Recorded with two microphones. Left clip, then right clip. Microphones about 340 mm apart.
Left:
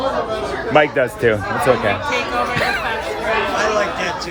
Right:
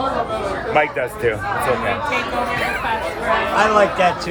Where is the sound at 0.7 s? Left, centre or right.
Left.